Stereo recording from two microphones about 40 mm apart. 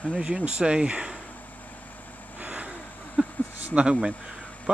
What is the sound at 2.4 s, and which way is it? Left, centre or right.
Vehicle, right.